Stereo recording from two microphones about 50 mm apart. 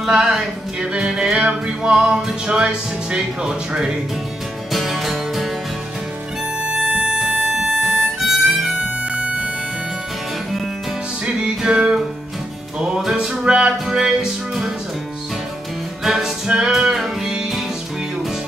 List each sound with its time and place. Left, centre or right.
0.0 s music: centre
4.7 s music: centre
6.6 s music: right
7.2 s harmonica: centre
9.1 s music: right
11.4 s music: centre
13.0 s music: centre
13.3 s music: right
13.8 s music: centre
16.0 s music: centre